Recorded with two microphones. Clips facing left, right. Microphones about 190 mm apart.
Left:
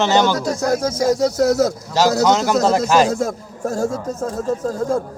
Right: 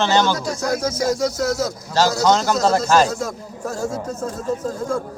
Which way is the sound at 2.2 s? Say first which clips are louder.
Left 2 dB; 15° left (ahead or behind).